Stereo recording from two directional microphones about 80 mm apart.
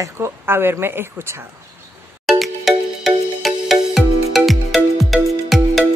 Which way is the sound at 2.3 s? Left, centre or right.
Centre.